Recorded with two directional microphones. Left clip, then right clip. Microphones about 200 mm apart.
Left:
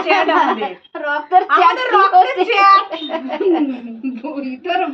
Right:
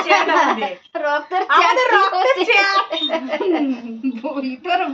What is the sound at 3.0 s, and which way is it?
Speech, 5° right (ahead or behind).